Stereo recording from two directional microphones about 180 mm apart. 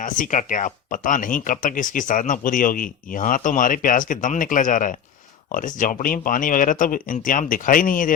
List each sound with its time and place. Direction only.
0.0 s speech: 45° left (ahead or behind)